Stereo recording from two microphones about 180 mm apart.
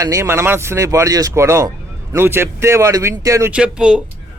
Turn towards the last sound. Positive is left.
turn(degrees=-5)  # may be behind; listen again after turning